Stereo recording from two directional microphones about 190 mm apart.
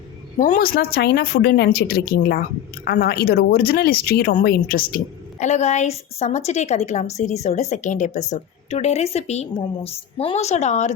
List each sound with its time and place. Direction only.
0.3 s speech: 40° left (ahead or behind)